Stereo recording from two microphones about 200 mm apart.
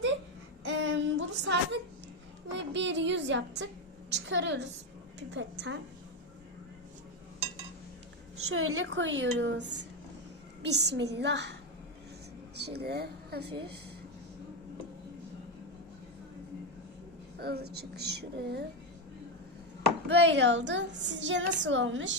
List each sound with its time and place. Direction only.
0.6 s a sound: 65° right (ahead or behind)
2.5 s a woman's voice: 65° right (ahead or behind)
8.4 s a woman's voice: 90° right; by 11.5 s 60° right (ahead or behind)
12.5 s speech: 55° right (ahead or behind)
17.4 s a woman's voice: 55° right (ahead or behind)
20.1 s a woman's voice: 60° right (ahead or behind)